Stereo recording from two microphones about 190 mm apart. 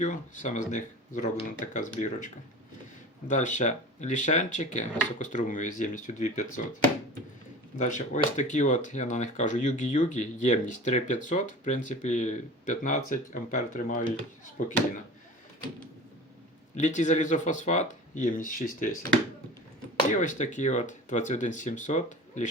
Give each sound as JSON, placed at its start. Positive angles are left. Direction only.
{"t": 0.0, "sound": "speech", "side_deg": 40}
{"t": 7.8, "sound": "speech", "side_deg": 40}
{"t": 16.7, "sound": "speech", "side_deg": 40}
{"t": 20.1, "sound": "speech", "side_deg": 40}